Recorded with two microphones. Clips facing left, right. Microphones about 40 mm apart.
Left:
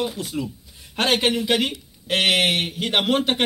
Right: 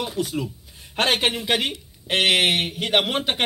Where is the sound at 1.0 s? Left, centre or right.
Centre.